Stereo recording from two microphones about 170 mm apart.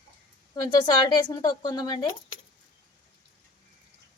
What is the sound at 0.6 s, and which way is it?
Speech, 25° left (ahead or behind).